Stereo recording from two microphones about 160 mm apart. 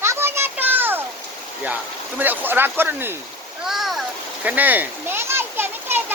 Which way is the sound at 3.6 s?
Centre (ahead or behind).